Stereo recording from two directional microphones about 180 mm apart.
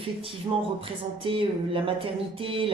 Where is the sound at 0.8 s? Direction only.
30° right (ahead or behind).